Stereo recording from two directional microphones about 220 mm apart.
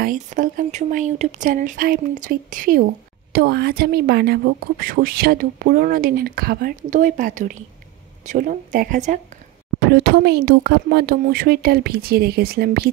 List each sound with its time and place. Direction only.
0.0 s speech: 35° right (ahead or behind)
9.8 s speech: 45° right (ahead or behind)